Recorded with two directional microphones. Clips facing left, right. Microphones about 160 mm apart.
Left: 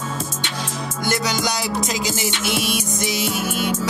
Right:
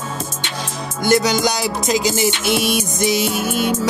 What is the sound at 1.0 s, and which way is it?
Music, 20° right (ahead or behind).